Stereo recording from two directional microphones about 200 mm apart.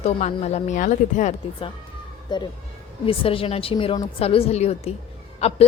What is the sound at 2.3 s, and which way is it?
A woman's voice, 20° left (ahead or behind).